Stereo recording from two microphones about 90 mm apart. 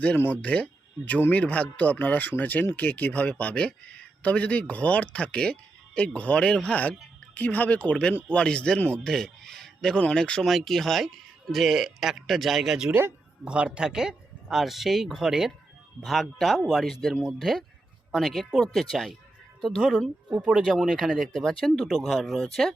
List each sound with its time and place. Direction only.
0.2 s speech: 15° left (ahead or behind); by 12.9 s 5° right (ahead or behind)
12.9 s speech: 25° right (ahead or behind)
13.4 s speech: 10° right (ahead or behind)
20.3 s speech: 10° right (ahead or behind)
20.9 s speech: centre (ahead or behind)